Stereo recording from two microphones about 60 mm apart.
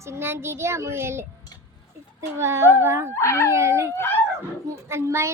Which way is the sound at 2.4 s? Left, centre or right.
Right.